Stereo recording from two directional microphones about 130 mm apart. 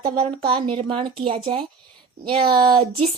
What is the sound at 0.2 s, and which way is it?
A woman's voice, 45° right (ahead or behind).